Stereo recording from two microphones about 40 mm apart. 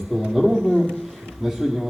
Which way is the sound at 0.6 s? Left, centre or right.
Centre.